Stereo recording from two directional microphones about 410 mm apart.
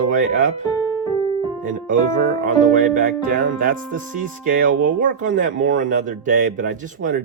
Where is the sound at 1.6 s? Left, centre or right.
Centre.